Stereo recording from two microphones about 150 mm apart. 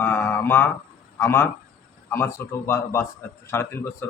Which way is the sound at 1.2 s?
15° left (ahead or behind).